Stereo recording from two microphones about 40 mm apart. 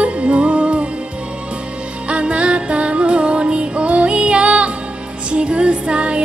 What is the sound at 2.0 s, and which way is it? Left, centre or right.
Music, right.